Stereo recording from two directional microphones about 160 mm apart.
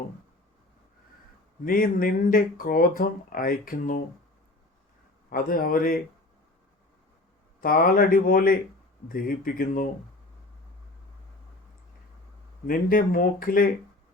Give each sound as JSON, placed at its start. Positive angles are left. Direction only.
{"t": 1.6, "sound": "speech", "side_deg": 60}
{"t": 5.3, "sound": "speech", "side_deg": 60}
{"t": 7.6, "sound": "speech", "side_deg": 60}
{"t": 12.6, "sound": "speech", "side_deg": 60}